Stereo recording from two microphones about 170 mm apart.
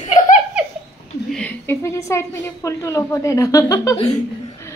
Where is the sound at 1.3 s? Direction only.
10° left (ahead or behind).